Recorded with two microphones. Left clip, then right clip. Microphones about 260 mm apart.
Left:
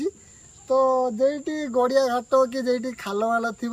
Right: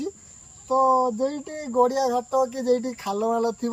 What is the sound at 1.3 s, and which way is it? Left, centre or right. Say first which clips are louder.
Speech: left 4 dB; left.